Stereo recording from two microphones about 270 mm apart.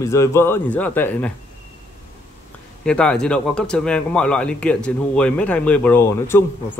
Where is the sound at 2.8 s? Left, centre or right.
Centre.